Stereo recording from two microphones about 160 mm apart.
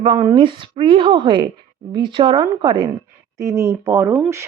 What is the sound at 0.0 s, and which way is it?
A woman's voice, 30° right (ahead or behind).